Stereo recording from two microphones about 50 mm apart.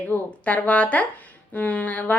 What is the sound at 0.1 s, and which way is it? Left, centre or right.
A woman's voice, left.